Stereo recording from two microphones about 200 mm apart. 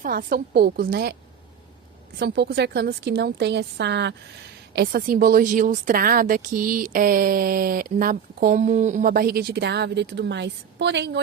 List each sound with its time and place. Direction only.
0.0 s a woman's voice: 45° right (ahead or behind)
2.1 s a woman's voice: 55° right (ahead or behind)